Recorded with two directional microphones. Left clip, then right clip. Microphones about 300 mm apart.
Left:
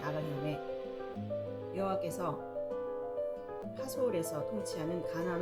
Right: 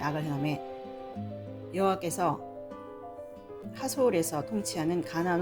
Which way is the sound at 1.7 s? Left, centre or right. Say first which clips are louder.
Right 7 dB; right.